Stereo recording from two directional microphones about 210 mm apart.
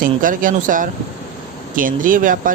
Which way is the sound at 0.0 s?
40° right (ahead or behind).